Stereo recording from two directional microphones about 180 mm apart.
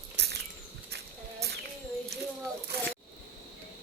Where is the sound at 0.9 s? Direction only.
65° right (ahead or behind).